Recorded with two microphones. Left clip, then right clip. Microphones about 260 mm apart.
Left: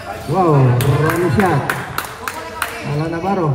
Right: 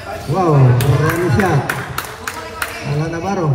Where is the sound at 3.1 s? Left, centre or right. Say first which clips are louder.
Left 2 dB; left.